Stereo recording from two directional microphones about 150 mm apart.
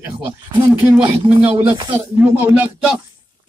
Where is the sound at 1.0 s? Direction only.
40° right (ahead or behind).